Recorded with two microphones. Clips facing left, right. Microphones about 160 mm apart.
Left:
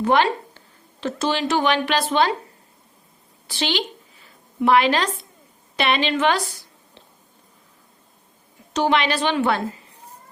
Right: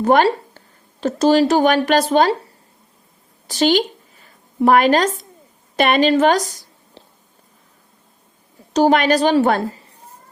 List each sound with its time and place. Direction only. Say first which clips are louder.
0.0 s speech: right 4 dB; 45° right (ahead or behind)
3.4 s a sound: right 9 dB; 40° right (ahead or behind)
5.7 s a woman's voice: right 7 dB; 45° right (ahead or behind)
8.7 s speech: right 6 dB; 40° right (ahead or behind)